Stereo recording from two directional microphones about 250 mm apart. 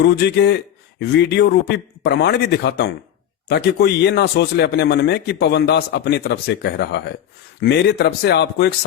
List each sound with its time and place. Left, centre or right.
0.0 s a man's voice: left